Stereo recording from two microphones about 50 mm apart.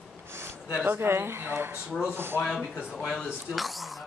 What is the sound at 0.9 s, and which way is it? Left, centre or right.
Speech, right.